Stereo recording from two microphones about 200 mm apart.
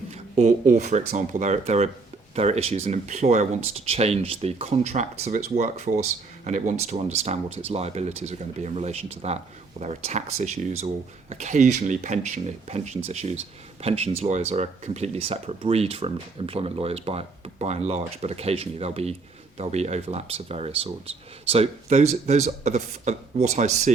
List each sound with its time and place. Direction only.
0.1 s speech: 35° right (ahead or behind)